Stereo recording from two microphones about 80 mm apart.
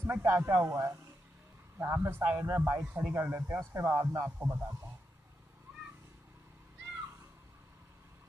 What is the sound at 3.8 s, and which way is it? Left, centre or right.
Speech, right.